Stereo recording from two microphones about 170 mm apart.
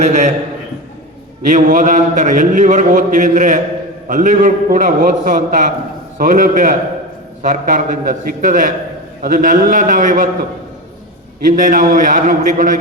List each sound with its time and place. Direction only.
0.0 s a man's voice: 45° right (ahead or behind)
1.5 s a man's voice: 50° right (ahead or behind)
11.5 s a man's voice: 50° right (ahead or behind)